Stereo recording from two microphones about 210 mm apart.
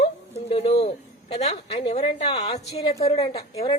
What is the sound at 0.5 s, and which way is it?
A woman's voice, 30° left (ahead or behind).